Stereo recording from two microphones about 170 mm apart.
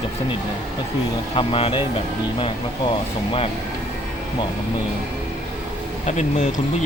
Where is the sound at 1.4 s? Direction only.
30° left (ahead or behind).